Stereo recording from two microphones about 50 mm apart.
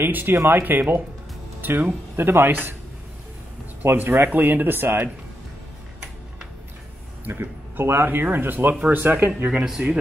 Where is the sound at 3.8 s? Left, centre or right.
Right.